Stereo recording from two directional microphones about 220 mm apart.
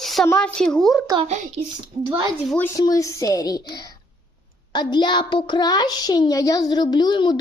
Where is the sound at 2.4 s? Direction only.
10° left (ahead or behind).